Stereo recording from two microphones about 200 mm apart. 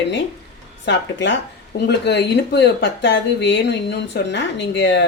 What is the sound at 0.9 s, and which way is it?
Speech, 65° left (ahead or behind).